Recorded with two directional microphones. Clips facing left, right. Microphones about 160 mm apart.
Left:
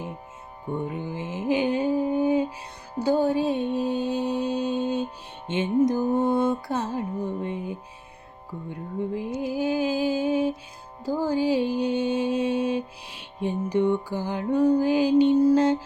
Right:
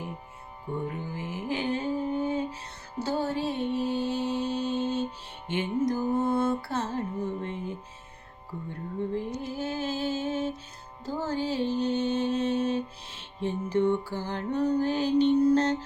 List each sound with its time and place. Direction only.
0.9 s music: 20° left (ahead or behind)
3.0 s mantra: 15° left (ahead or behind)
5.5 s music: 20° left (ahead or behind)